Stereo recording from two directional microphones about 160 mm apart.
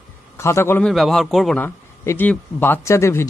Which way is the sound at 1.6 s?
10° left (ahead or behind).